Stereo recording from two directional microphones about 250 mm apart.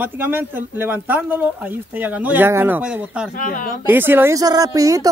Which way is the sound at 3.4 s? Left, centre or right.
Left.